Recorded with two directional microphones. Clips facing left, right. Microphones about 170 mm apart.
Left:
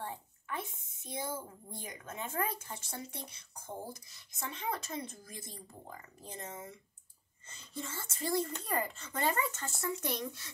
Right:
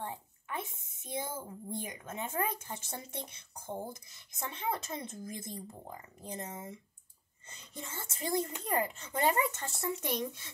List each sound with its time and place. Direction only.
0.0 s speech: 15° right (ahead or behind)